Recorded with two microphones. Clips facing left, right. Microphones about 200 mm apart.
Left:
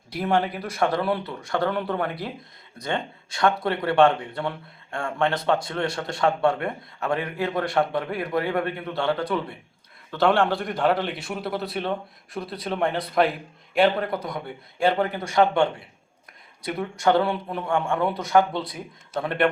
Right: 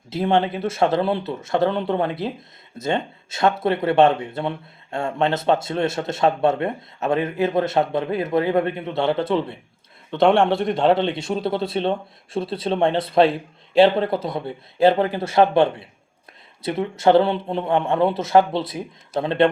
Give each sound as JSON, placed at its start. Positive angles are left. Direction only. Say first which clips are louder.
{"t": 0.1, "sound": "speech", "louder": "right 4 dB", "side_deg": -25}
{"t": 17.0, "sound": "speech", "louder": "right 5 dB", "side_deg": -25}